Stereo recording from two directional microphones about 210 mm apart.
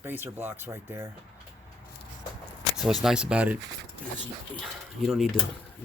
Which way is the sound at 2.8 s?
Centre (ahead or behind).